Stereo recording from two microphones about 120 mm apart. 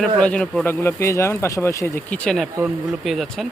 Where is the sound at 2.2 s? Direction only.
5° left (ahead or behind).